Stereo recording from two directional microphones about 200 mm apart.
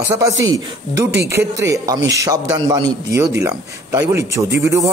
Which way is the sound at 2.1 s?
15° right (ahead or behind).